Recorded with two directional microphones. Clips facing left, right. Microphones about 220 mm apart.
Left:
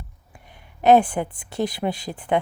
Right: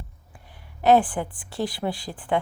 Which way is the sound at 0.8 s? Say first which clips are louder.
Left 3 dB; 20° left (ahead or behind).